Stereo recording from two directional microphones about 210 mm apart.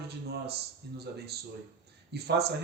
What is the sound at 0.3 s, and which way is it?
Speech, 50° right (ahead or behind).